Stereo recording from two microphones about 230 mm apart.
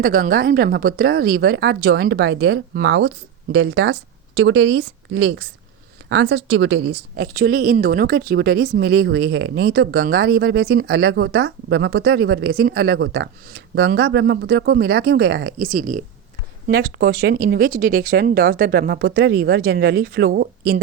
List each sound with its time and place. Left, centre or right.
0.0 s speech: right
6.7 s a woman's voice: right
7.2 s speech: right